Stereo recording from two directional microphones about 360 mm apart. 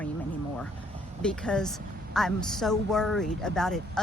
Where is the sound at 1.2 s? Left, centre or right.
Centre.